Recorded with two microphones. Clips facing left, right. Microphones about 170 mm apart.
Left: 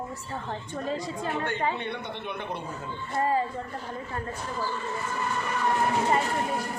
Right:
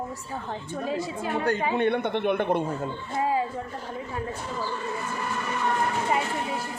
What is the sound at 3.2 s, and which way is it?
Speech, 5° right (ahead or behind).